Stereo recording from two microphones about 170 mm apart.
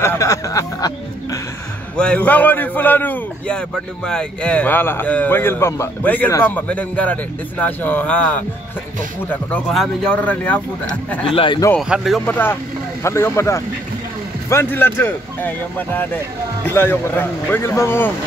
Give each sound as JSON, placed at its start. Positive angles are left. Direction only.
{"t": 0.0, "sound": "speech", "side_deg": 15}
{"t": 2.0, "sound": "a man's voice", "side_deg": 5}
{"t": 11.2, "sound": "a man's voice", "side_deg": 30}
{"t": 11.8, "sound": "speech", "side_deg": 0}
{"t": 12.3, "sound": "a man's voice", "side_deg": 10}